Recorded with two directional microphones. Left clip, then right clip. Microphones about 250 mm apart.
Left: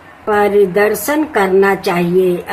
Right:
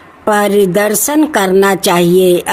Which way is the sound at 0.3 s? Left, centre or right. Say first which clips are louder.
Right 1 dB; right.